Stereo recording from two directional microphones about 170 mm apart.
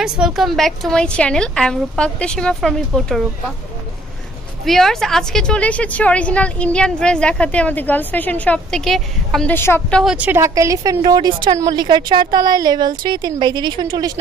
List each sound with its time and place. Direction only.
0.0 s a woman's voice: centre (ahead or behind)
4.6 s a woman's voice: centre (ahead or behind)
10.1 s a woman's voice: 10° right (ahead or behind)